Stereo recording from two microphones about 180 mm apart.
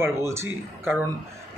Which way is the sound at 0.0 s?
15° right (ahead or behind).